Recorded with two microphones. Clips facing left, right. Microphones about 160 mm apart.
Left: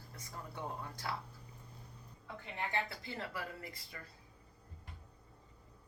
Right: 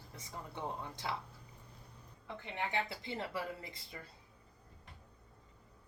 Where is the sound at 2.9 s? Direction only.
25° right (ahead or behind).